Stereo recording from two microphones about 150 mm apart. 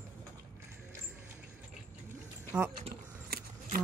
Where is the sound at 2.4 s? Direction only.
10° right (ahead or behind).